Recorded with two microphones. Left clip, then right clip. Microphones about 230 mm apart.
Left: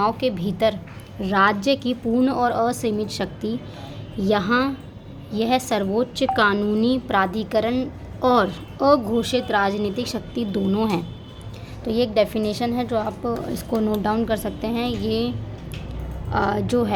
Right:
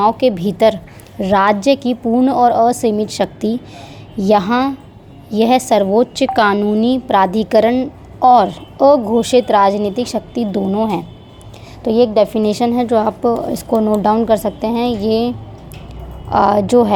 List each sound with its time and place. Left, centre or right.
0.2 s a woman's voice: right
9.2 s a woman's voice: right
16.3 s a woman's voice: right